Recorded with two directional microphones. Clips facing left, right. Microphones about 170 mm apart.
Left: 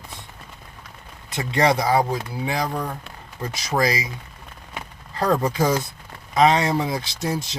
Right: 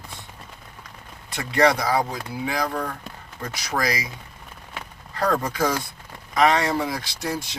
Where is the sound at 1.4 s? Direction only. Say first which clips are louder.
Even; 25° left (ahead or behind).